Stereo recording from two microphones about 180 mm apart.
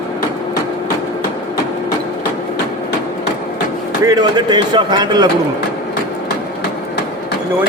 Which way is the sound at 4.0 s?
20° right (ahead or behind).